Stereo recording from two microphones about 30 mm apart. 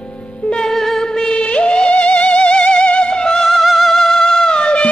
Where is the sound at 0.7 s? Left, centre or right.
Centre.